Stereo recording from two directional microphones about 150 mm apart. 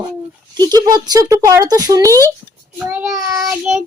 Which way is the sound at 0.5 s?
25° right (ahead or behind).